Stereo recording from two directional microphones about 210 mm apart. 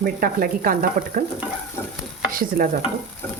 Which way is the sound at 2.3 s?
45° right (ahead or behind).